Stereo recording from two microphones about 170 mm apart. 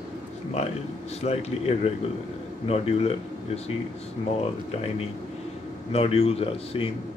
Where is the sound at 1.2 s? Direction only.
40° left (ahead or behind).